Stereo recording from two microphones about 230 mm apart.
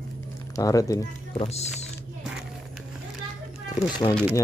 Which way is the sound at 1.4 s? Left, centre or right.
Left.